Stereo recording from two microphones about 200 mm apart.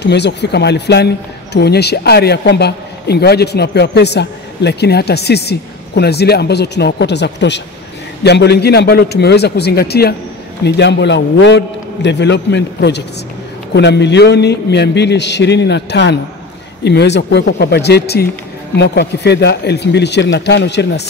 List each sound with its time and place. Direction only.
0.0 s a man's voice: 60° left (ahead or behind)